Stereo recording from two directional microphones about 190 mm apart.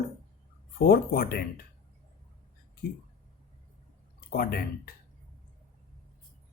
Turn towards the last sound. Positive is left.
turn(degrees=50)  # may be behind; listen again after turning